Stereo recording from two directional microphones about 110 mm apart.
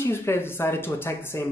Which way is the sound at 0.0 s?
20° left (ahead or behind).